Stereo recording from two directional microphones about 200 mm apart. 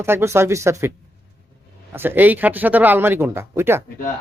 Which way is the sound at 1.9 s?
10° right (ahead or behind).